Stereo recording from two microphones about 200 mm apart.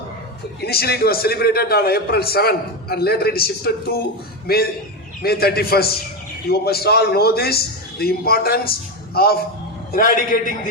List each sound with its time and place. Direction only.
0.6 s a man's voice: 50° left (ahead or behind)